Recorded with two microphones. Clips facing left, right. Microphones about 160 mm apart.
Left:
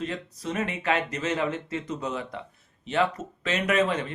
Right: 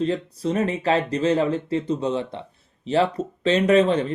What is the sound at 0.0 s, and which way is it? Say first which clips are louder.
Speech: right 9 dB; 30° right (ahead or behind).